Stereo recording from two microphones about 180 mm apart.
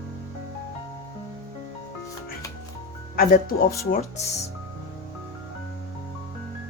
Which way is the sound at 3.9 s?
35° left (ahead or behind).